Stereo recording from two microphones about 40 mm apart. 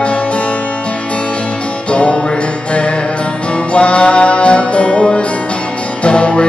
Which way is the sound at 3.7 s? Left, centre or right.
Left.